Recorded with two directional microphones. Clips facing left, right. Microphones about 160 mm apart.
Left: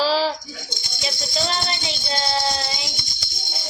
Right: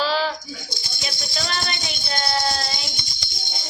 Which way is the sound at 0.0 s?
35° left (ahead or behind).